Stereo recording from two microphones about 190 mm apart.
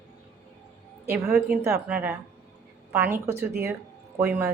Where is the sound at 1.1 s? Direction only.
10° right (ahead or behind).